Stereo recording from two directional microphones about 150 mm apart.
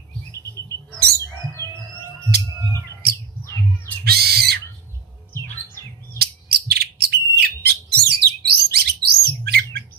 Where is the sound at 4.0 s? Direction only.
90° right.